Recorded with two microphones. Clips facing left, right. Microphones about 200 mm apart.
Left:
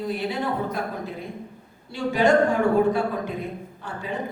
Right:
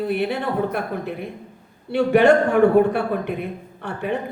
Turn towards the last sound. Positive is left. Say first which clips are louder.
# right 6 dB
turn(degrees=-65)  # may be behind; listen again after turning